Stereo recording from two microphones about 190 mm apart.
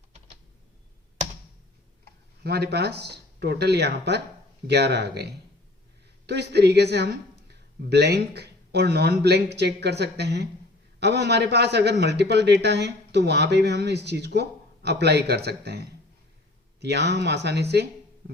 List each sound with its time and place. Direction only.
2.4 s a man's voice: 55° right (ahead or behind)